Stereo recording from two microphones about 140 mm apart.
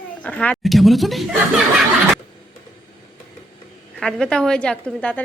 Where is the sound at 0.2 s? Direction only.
10° left (ahead or behind).